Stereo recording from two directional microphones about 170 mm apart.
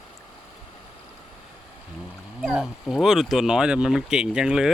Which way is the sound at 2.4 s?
5° right (ahead or behind).